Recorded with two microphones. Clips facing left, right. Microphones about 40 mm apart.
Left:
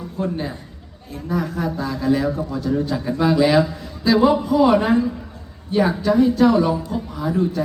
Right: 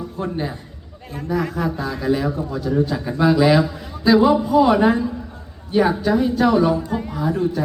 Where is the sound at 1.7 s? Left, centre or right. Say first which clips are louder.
Left 1 dB; right.